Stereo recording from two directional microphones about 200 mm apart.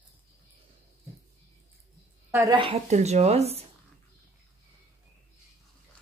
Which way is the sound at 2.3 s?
20° right (ahead or behind).